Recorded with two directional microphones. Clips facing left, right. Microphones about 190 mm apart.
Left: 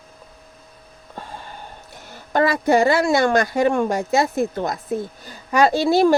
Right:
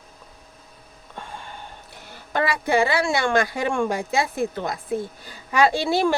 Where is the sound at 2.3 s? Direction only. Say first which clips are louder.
Left 5 dB; 45° left (ahead or behind).